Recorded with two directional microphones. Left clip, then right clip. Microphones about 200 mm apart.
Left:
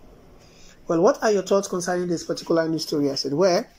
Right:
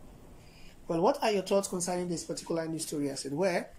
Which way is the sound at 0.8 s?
Centre (ahead or behind).